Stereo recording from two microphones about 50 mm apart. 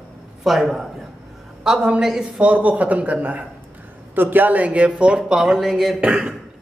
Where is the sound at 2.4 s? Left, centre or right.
Right.